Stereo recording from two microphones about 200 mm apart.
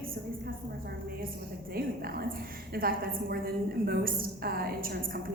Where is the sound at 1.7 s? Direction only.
50° right (ahead or behind).